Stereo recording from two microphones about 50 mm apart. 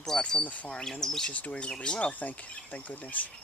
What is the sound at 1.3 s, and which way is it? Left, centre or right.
Speech, left.